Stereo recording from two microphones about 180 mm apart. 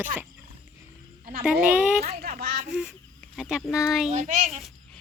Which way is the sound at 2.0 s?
60° right (ahead or behind).